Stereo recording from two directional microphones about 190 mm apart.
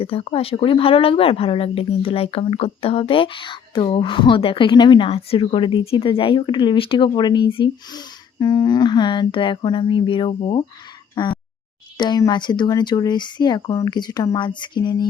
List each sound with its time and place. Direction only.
0.0 s speech: 30° left (ahead or behind)
11.1 s a sound: 25° left (ahead or behind)
11.9 s speech: 20° left (ahead or behind)